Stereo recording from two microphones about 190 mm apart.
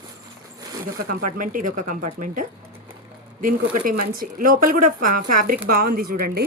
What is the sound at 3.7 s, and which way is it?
Speech, 45° right (ahead or behind).